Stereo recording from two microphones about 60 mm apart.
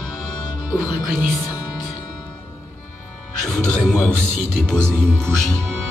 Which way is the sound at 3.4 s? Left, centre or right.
Left.